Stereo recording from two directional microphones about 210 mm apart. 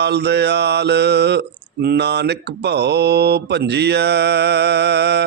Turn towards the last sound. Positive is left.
turn(degrees=-55)  # may be behind; listen again after turning